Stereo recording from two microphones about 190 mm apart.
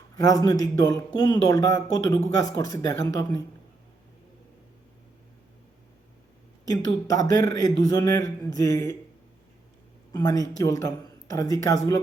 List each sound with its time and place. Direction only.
0.2 s speech: 20° left (ahead or behind)
6.7 s speech: 20° left (ahead or behind)
10.1 s speech: 20° left (ahead or behind)